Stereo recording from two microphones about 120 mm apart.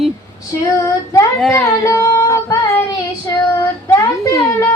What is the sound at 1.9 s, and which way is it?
Music, 25° left (ahead or behind).